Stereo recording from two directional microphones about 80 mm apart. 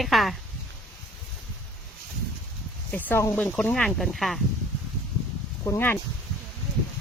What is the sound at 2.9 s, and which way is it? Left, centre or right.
Speech, left.